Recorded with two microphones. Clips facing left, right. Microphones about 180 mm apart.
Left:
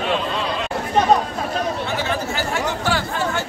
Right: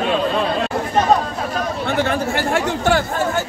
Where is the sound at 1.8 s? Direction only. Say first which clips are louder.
Right 4 dB; 55° right (ahead or behind).